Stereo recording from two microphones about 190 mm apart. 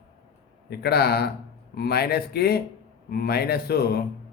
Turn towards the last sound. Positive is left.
turn(degrees=55)  # may be behind; listen again after turning